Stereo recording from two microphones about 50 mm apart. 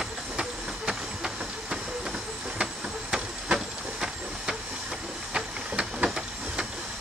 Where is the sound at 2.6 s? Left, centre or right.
Centre.